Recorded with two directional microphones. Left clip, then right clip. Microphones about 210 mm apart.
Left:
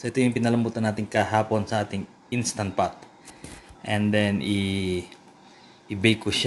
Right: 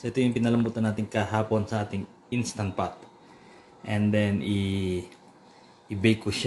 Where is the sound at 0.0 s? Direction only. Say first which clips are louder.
Left 2 dB; 5° left (ahead or behind).